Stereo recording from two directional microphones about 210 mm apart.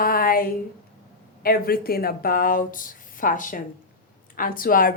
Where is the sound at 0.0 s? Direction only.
45° left (ahead or behind).